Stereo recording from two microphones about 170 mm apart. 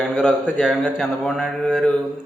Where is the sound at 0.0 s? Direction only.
5° right (ahead or behind).